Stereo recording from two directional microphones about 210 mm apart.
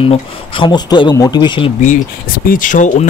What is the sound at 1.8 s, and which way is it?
Speech, 40° left (ahead or behind).